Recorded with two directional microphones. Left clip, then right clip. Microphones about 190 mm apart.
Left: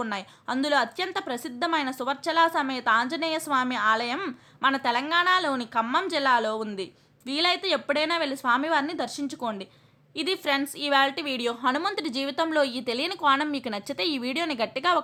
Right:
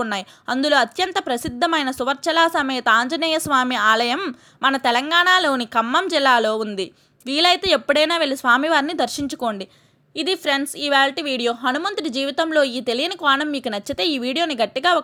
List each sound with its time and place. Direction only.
0.0 s a woman's voice: 30° right (ahead or behind)